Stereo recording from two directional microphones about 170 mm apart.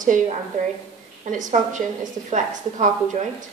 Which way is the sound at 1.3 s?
45° right (ahead or behind).